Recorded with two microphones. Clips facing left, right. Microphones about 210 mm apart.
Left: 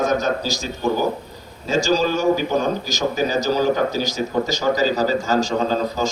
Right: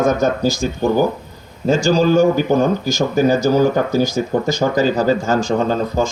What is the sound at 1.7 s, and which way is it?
Speech, 55° right (ahead or behind).